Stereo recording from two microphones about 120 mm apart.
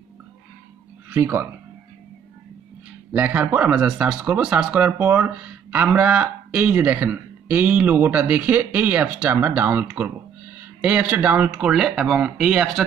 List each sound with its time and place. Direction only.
1.1 s speech: 20° right (ahead or behind)
3.1 s speech: 15° right (ahead or behind)
11.5 s speech: 5° right (ahead or behind)